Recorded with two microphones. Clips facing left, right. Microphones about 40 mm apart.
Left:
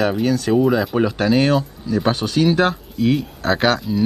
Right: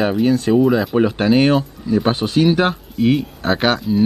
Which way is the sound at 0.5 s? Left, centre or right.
Centre.